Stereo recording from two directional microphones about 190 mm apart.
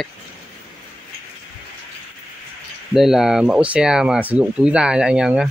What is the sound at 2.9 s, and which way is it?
Speech, centre (ahead or behind).